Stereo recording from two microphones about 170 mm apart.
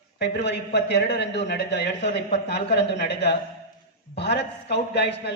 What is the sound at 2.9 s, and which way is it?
A man's voice, 90° left.